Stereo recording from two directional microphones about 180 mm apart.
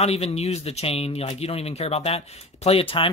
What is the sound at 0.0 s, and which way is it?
Speech, 35° left (ahead or behind).